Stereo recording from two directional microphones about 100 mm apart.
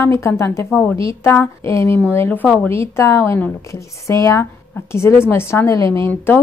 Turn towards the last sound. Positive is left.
turn(degrees=20)  # may be behind; listen again after turning